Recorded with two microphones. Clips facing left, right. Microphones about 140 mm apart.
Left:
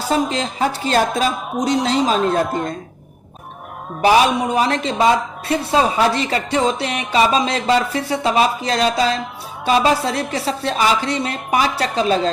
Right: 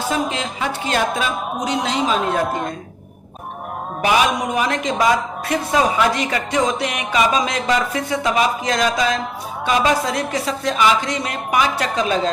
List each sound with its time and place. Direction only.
0.1 s a woman's voice: 35° left (ahead or behind)
4.0 s a woman's voice: 35° left (ahead or behind)